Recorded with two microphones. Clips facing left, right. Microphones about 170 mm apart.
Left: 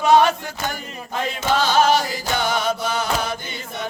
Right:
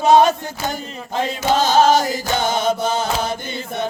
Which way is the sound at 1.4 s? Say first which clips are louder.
Right 3 dB; 45° right (ahead or behind).